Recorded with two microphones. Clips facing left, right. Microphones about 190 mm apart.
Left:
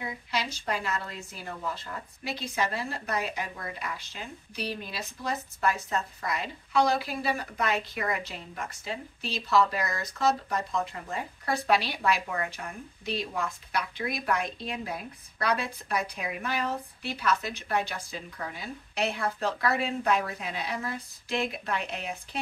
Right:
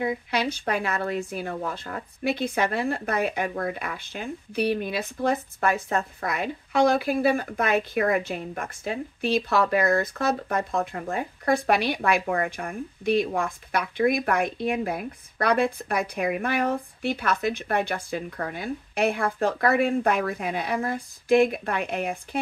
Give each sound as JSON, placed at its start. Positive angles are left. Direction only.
{"t": 0.0, "sound": "speech", "side_deg": -55}